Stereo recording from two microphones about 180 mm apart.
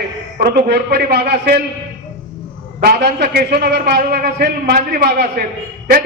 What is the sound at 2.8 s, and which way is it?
A man's voice, 60° right (ahead or behind).